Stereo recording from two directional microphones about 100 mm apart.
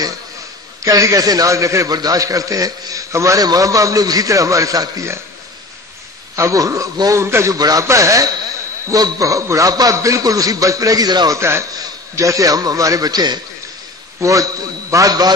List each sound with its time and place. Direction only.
0.8 s a man's voice: 35° right (ahead or behind)
6.3 s a man's voice: 35° right (ahead or behind)
7.5 s a man's voice: 40° right (ahead or behind)
11.3 s a man's voice: 25° right (ahead or behind)
11.7 s a man's voice: 35° right (ahead or behind)
14.2 s a man's voice: 35° right (ahead or behind)